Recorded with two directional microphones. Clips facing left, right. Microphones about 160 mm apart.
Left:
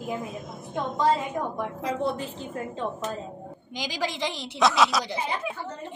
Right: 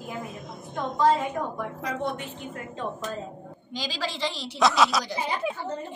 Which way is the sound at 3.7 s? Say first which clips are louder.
Left 1 dB; 15° left (ahead or behind).